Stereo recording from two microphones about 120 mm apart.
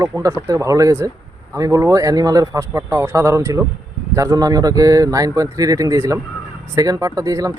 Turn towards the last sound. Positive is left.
turn(degrees=-30)  # may be behind; listen again after turning